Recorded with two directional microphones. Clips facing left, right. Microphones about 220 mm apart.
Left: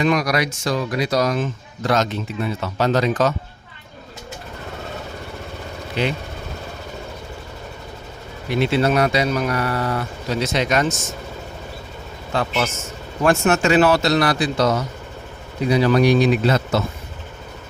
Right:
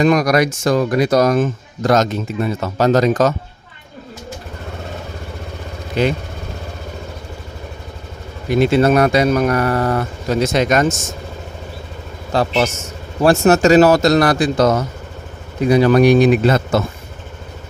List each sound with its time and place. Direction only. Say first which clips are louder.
0.0 s speech: right 6 dB; 45° right (ahead or behind)
6.0 s speech: right 5 dB; 45° right (ahead or behind)
8.4 s speech: right 5 dB; 45° right (ahead or behind)
12.3 s a man's voice: right 5 dB; 35° right (ahead or behind)